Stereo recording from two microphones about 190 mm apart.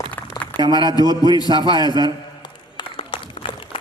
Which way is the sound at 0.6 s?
25° right (ahead or behind).